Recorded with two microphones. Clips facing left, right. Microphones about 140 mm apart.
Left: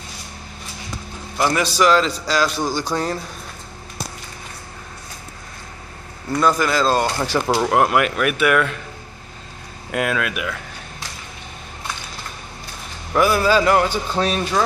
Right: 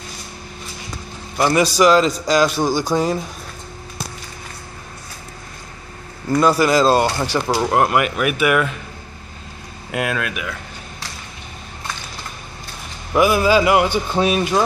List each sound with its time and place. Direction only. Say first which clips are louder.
1.6 s speech: right 4 dB; 10° right (ahead or behind)
6.3 s speech: right 4 dB; 10° right (ahead or behind)
9.8 s speech: left 1 dB; centre (ahead or behind)
13.1 s speech: right 2 dB; 10° right (ahead or behind)